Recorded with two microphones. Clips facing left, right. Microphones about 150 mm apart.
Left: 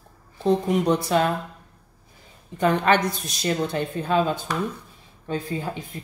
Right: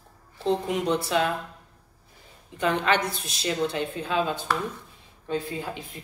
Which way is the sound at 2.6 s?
45° left (ahead or behind).